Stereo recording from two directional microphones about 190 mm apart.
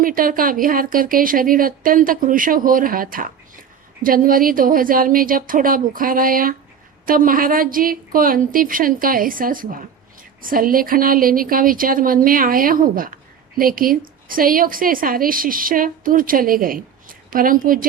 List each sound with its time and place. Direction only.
0.0 s a woman's voice: 45° right (ahead or behind)